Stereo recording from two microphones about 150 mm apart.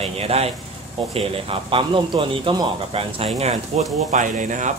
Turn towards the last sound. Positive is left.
turn(degrees=-55)  # may be behind; listen again after turning